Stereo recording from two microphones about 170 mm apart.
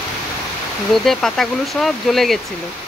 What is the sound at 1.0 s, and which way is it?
Speech, centre (ahead or behind).